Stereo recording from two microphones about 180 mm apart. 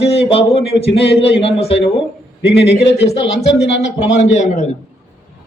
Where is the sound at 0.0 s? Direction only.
35° left (ahead or behind).